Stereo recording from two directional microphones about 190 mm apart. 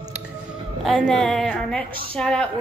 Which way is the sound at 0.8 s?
Centre (ahead or behind).